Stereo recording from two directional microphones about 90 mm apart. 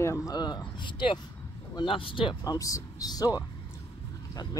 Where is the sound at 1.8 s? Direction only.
75° left (ahead or behind).